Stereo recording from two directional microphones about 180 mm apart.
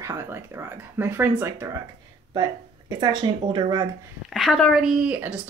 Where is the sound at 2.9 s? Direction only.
25° right (ahead or behind).